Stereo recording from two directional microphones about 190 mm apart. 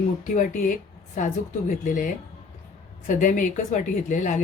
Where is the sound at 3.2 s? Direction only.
45° left (ahead or behind).